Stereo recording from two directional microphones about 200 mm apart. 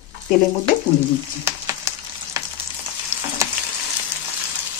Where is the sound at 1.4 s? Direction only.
15° right (ahead or behind).